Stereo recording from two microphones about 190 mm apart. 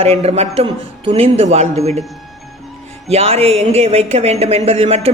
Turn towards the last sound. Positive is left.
turn(degrees=-30)  # may be behind; listen again after turning